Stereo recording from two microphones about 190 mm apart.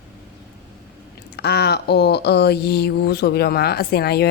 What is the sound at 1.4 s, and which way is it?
Speech, 60° left (ahead or behind).